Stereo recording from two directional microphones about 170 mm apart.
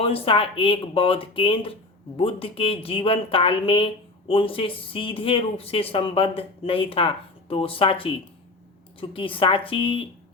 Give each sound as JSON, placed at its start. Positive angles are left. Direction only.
{"t": 0.0, "sound": "a woman's voice", "side_deg": 35}